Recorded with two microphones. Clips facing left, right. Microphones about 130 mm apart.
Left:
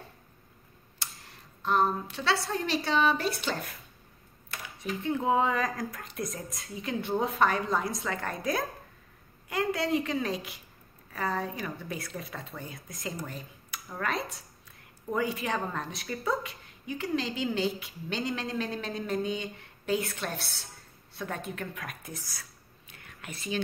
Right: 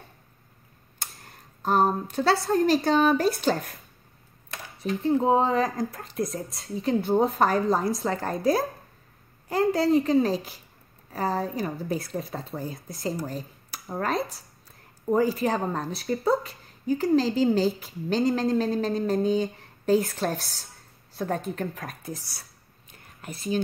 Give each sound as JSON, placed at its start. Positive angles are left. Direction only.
{"t": 0.9, "sound": "speech", "side_deg": -50}
{"t": 4.8, "sound": "a woman's voice", "side_deg": -35}
{"t": 21.1, "sound": "a sound", "side_deg": -40}
{"t": 21.5, "sound": "a woman's voice", "side_deg": -35}